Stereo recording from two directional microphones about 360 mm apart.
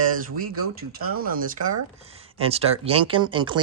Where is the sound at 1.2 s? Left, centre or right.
Right.